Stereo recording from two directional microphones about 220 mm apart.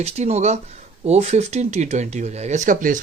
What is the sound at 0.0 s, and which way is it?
Speech, 30° right (ahead or behind).